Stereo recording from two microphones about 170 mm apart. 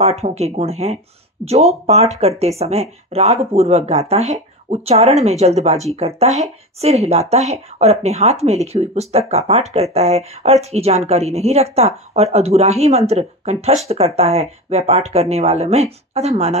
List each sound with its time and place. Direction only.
0.0 s speech: 40° right (ahead or behind)